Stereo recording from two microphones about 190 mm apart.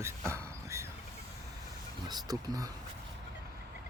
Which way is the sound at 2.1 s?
20° right (ahead or behind).